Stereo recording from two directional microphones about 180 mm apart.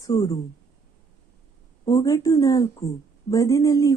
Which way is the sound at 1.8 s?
20° left (ahead or behind).